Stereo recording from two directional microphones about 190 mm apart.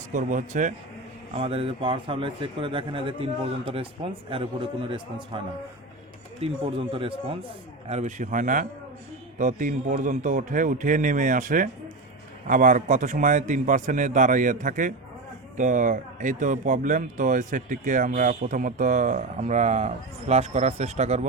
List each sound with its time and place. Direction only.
0.1 s a man's voice: 40° right (ahead or behind)
1.4 s speech: 30° right (ahead or behind)
6.4 s a man's voice: 30° right (ahead or behind)